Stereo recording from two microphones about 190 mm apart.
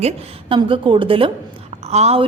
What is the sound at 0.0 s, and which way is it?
A woman's voice, 30° right (ahead or behind).